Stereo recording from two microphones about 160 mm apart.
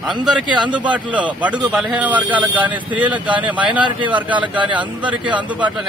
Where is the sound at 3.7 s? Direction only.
30° right (ahead or behind).